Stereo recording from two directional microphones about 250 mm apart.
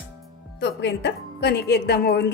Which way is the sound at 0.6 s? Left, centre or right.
Left.